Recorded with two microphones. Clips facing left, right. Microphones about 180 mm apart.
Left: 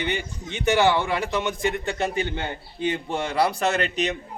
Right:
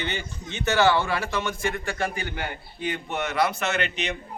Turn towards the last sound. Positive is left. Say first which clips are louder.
# left 4 dB
turn(degrees=40)  # may be behind; listen again after turning